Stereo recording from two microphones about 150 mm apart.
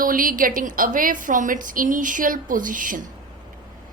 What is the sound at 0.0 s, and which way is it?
A woman's voice, 70° right (ahead or behind).